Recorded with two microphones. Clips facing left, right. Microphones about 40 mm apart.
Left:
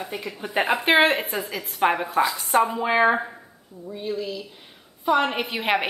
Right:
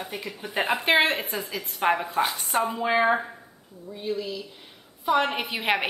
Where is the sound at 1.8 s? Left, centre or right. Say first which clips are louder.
Left 2 dB; left.